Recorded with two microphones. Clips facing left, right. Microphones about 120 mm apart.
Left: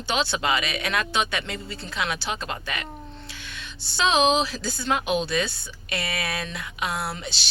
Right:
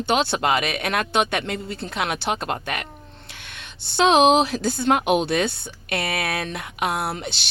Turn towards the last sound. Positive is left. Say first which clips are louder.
# right 4 dB
turn(degrees=-60)  # may be behind; listen again after turning